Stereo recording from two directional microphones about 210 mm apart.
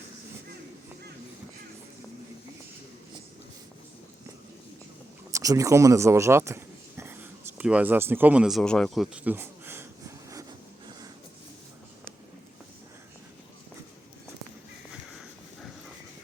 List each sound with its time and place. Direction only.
5.3 s speech: 15° right (ahead or behind)